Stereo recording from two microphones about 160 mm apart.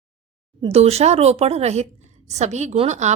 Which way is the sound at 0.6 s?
40° right (ahead or behind).